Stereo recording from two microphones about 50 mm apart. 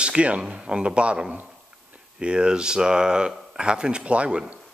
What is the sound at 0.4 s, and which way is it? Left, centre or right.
Speech, centre.